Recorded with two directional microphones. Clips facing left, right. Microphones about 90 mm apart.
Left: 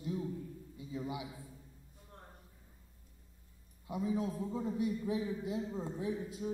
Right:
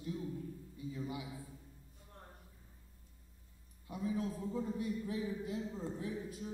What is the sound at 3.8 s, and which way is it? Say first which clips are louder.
A man's voice: left 3 dB; 20° left (ahead or behind).